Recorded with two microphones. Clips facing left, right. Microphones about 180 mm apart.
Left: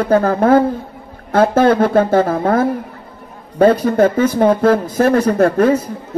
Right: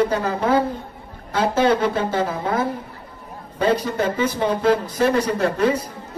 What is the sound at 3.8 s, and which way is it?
Speech, 50° left (ahead or behind).